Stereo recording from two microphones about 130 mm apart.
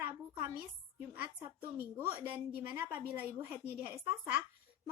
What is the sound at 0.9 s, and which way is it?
A woman's voice, 15° right (ahead or behind).